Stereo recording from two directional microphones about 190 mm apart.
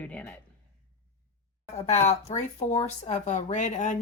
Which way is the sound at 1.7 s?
35° left (ahead or behind).